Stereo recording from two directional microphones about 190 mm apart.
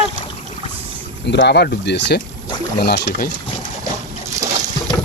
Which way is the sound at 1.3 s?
65° left (ahead or behind).